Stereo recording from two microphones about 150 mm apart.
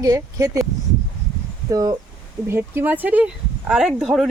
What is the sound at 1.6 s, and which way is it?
Speech, 25° right (ahead or behind).